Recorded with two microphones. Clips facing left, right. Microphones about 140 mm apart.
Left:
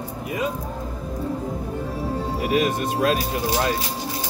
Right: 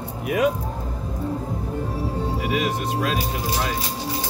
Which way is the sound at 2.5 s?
50° left (ahead or behind).